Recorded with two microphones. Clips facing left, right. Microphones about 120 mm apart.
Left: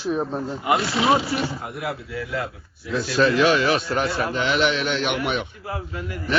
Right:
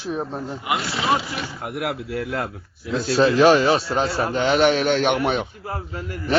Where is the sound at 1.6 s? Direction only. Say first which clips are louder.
Right 3 dB; 65° right (ahead or behind).